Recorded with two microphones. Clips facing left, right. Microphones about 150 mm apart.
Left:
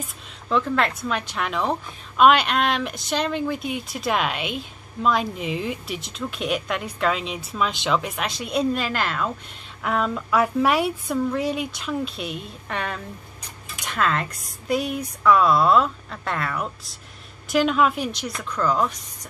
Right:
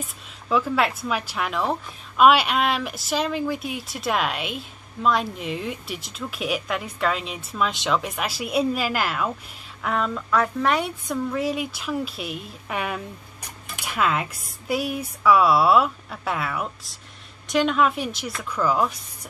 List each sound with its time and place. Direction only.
0.0 s a woman's voice: 5° right (ahead or behind)